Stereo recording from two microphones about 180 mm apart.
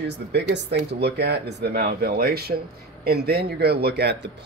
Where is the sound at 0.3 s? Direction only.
65° right (ahead or behind).